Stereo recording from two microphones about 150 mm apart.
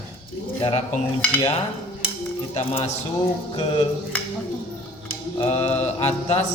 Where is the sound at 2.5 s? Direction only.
45° left (ahead or behind).